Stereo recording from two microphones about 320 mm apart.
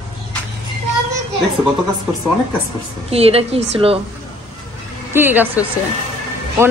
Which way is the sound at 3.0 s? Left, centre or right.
Centre.